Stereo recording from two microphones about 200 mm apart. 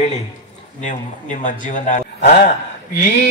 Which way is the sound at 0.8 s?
40° left (ahead or behind).